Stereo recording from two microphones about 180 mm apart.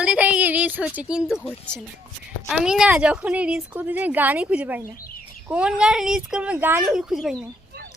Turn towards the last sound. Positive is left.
turn(degrees=-5)  # may be behind; listen again after turning